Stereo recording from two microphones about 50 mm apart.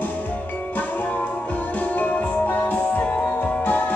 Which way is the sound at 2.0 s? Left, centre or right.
Left.